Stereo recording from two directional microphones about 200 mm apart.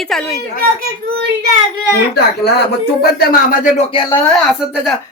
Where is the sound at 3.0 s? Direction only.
50° left (ahead or behind).